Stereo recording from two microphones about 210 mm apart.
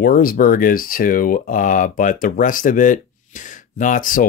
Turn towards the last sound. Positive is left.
turn(degrees=40)  # may be behind; listen again after turning